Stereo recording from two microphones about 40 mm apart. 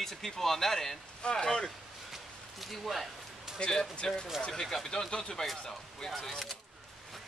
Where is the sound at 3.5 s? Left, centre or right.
Left.